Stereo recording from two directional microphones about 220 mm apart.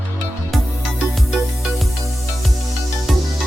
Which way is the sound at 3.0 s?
Centre (ahead or behind).